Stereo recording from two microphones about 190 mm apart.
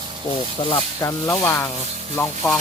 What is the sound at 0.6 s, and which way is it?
Speech, 25° left (ahead or behind).